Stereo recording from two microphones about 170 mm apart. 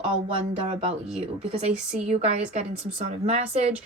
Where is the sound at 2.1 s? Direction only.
40° right (ahead or behind).